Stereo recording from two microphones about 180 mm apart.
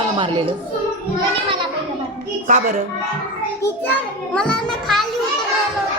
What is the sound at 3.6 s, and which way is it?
A child's voice, 10° left (ahead or behind).